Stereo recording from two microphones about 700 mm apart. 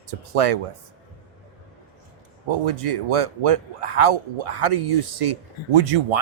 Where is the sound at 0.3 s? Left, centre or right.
Right.